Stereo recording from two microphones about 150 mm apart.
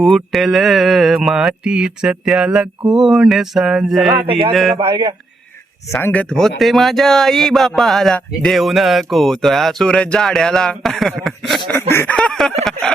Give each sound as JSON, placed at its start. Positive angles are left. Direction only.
{"t": 0.0, "sound": "speech", "side_deg": 0}
{"t": 4.3, "sound": "a man's voice", "side_deg": -40}
{"t": 4.5, "sound": "speech", "side_deg": 0}
{"t": 4.8, "sound": "a man's voice", "side_deg": -35}
{"t": 5.9, "sound": "speech", "side_deg": 15}
{"t": 11.8, "sound": "speech", "side_deg": 15}
{"t": 12.1, "sound": "a sound", "side_deg": 5}